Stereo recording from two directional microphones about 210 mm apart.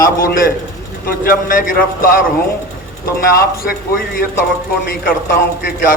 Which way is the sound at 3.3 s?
45° left (ahead or behind).